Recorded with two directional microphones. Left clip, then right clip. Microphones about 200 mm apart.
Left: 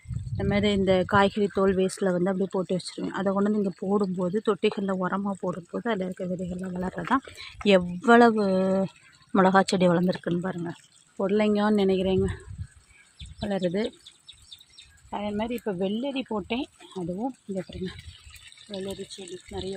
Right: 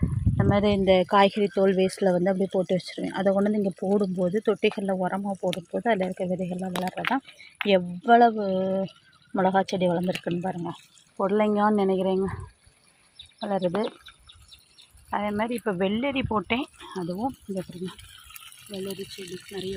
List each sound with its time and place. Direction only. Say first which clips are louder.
0.3 s speech: right 2 dB; 10° left (ahead or behind)
7.1 s speech: left 2 dB; 25° left (ahead or behind)
10.2 s speech: right 1 dB; 10° left (ahead or behind)
11.2 s speech: right 2 dB; 25° left (ahead or behind)
13.4 s speech: right 2 dB; 25° left (ahead or behind)
15.1 s speech: right 3 dB; 5° left (ahead or behind)
18.7 s speech: even; 30° right (ahead or behind)